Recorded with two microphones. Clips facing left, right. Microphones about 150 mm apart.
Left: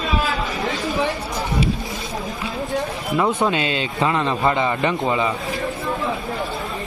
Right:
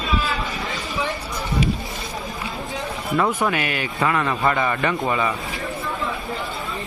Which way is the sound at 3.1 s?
20° left (ahead or behind).